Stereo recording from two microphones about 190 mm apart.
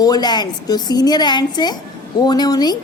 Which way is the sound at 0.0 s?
20° left (ahead or behind).